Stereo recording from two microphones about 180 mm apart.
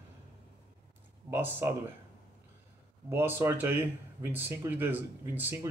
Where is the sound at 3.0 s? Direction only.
10° right (ahead or behind).